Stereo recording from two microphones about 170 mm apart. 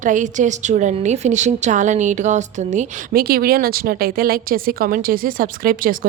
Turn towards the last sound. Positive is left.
turn(degrees=-55)  # may be behind; listen again after turning